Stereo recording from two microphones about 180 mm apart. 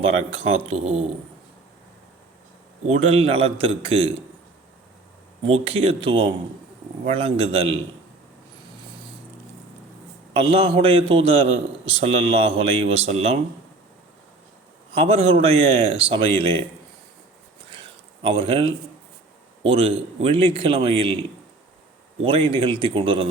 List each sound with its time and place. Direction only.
0.2 s a man's voice: 35° right (ahead or behind)
2.8 s a man's voice: 35° right (ahead or behind)
5.4 s a man's voice: 35° right (ahead or behind)
10.3 s a man's voice: 30° right (ahead or behind)
14.9 s a man's voice: 35° right (ahead or behind)
18.2 s a man's voice: 30° right (ahead or behind)
22.2 s a man's voice: 30° right (ahead or behind)